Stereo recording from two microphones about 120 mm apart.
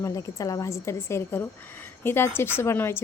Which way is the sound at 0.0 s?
25° left (ahead or behind).